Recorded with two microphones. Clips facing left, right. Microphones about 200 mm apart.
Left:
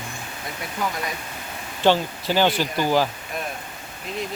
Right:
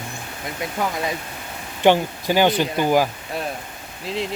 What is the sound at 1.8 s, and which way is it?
Speech, 15° right (ahead or behind).